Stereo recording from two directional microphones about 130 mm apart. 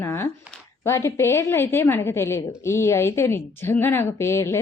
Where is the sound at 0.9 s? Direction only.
20° left (ahead or behind).